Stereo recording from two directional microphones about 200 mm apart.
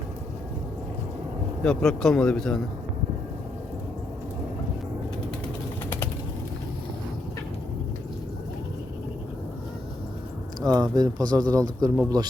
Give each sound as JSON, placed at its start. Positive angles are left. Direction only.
{"t": 1.6, "sound": "a man's voice", "side_deg": 5}
{"t": 10.6, "sound": "speech", "side_deg": -20}